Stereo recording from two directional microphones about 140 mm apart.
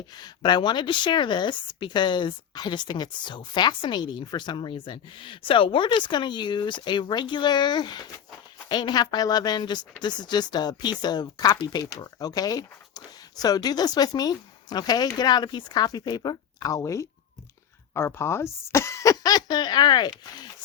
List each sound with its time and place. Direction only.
0.2 s speech: 30° left (ahead or behind)